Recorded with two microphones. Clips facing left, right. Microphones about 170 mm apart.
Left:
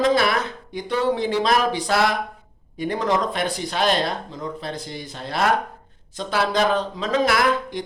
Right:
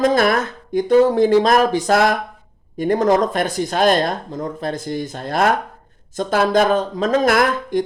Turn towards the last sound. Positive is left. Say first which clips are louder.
# right 4 dB
turn(degrees=-50)  # may be behind; listen again after turning